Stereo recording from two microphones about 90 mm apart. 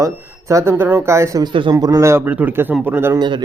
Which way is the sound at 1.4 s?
65° right (ahead or behind).